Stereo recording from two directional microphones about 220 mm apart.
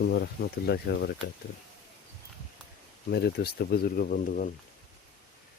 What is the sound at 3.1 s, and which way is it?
Speech, 45° left (ahead or behind).